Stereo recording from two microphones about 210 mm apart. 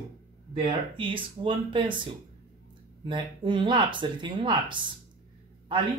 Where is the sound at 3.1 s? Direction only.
20° right (ahead or behind).